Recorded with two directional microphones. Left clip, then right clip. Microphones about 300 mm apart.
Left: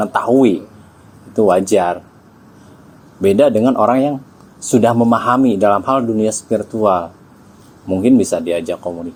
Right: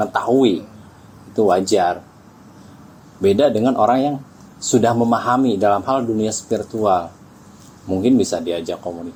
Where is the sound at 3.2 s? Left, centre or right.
Centre.